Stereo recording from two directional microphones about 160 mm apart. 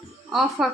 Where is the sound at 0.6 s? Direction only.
Centre (ahead or behind).